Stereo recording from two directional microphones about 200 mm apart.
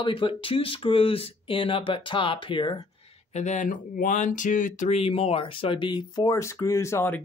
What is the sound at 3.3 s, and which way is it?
Speech, 35° left (ahead or behind).